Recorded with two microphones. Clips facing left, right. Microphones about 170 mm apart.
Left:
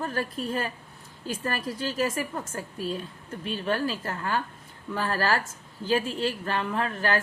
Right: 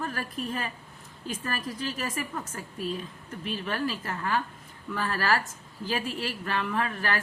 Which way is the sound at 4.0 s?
30° left (ahead or behind).